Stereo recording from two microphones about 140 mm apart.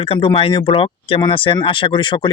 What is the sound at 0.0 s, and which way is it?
Speech, 40° left (ahead or behind).